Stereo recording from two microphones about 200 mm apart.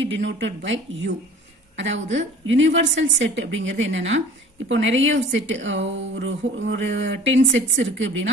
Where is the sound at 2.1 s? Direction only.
70° right (ahead or behind).